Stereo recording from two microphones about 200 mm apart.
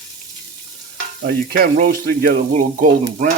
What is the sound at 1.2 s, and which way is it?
Speech, 50° right (ahead or behind).